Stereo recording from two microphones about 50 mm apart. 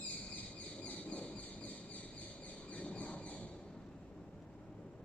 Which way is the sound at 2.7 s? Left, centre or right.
Left.